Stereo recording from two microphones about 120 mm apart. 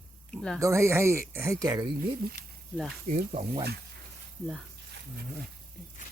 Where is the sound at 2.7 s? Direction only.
Centre (ahead or behind).